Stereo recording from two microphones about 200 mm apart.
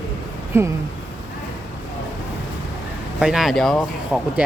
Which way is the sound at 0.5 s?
10° right (ahead or behind).